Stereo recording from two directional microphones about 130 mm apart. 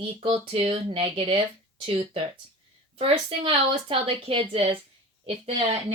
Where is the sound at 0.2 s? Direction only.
50° right (ahead or behind).